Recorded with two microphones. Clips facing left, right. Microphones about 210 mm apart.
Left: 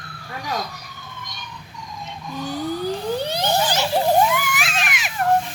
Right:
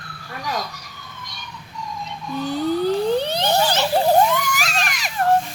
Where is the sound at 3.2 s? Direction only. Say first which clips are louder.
Right 2 dB; 10° left (ahead or behind).